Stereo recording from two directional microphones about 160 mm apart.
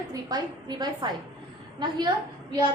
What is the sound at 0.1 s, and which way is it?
A woman's voice, 25° right (ahead or behind).